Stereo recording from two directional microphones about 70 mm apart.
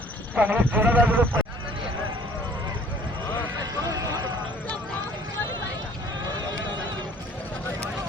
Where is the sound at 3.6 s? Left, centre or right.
Right.